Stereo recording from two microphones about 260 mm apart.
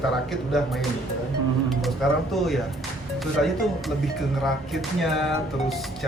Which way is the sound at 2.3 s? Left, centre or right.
Centre.